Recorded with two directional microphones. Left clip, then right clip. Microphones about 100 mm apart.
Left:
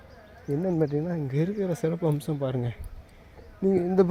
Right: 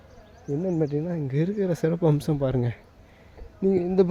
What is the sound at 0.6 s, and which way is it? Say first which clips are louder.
Speech: even; 40° right (ahead or behind).